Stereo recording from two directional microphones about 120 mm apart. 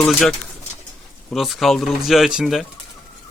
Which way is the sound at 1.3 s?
Centre (ahead or behind).